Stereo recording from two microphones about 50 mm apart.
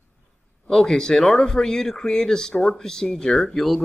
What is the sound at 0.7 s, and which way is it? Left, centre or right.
Speech, centre.